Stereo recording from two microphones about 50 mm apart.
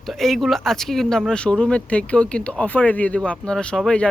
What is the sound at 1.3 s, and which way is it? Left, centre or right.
Speech, left.